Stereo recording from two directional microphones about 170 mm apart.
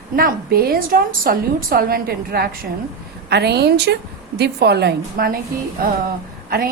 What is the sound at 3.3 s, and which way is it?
A woman's voice, 75° right (ahead or behind).